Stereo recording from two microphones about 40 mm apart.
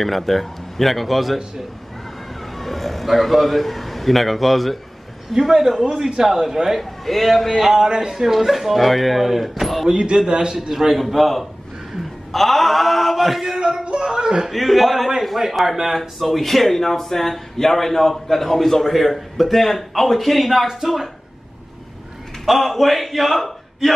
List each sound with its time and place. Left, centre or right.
0.0 s speech: centre
2.5 s a man's voice: centre
5.3 s a man's voice: centre
5.9 s speech: right
6.2 s a man's voice: centre
6.8 s speech: centre
7.7 s speech: centre
10.3 s speech: right
10.7 s speech: centre
13.8 s speech: right
14.5 s speech: centre
16.0 s speech: centre
22.5 s speech: centre